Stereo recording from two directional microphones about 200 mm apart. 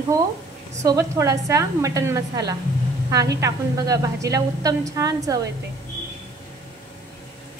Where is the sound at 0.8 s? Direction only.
15° right (ahead or behind).